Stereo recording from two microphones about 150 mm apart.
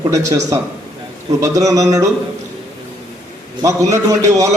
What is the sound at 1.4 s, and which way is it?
Speech, 20° right (ahead or behind).